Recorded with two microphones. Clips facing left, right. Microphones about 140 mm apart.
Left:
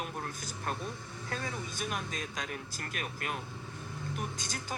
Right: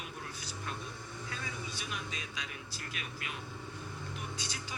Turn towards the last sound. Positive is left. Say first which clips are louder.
# left 3 dB
turn(degrees=45)  # may be behind; listen again after turning